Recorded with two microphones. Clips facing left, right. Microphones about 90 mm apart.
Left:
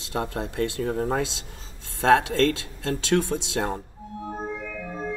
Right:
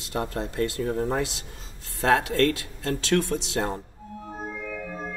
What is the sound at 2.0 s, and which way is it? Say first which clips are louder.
Speech: left 2 dB; 25° left (ahead or behind).